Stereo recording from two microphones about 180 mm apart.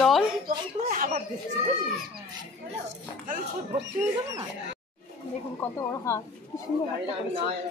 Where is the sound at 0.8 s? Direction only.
50° right (ahead or behind).